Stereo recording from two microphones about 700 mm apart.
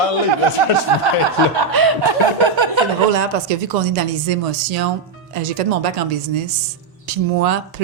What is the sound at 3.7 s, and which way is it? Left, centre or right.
A woman's voice, right.